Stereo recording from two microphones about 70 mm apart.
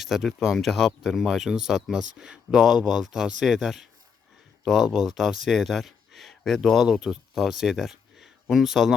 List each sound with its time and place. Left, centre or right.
0.0 s speech: centre